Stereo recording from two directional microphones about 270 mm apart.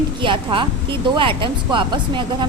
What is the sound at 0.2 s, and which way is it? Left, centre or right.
A woman's voice, centre.